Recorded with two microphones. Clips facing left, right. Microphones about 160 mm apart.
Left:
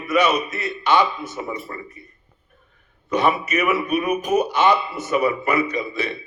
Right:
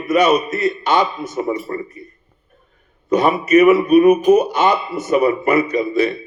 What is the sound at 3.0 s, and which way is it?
A man's voice, 40° right (ahead or behind).